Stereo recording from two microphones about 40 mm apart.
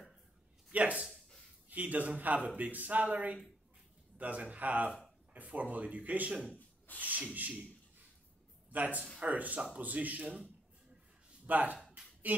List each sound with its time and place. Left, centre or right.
0.7 s a man's voice: right
8.7 s a man's voice: right
11.4 s speech: right